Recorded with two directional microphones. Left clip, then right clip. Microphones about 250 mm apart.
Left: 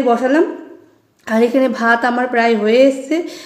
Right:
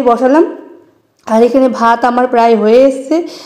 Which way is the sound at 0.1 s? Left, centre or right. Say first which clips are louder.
Right 6 dB; centre.